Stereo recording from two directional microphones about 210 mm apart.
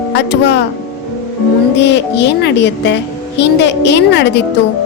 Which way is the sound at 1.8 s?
55° left (ahead or behind).